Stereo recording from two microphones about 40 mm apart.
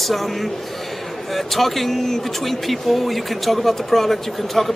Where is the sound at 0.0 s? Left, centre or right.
Centre.